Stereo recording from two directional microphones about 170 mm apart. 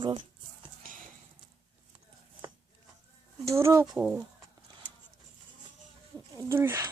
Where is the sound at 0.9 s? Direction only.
55° right (ahead or behind).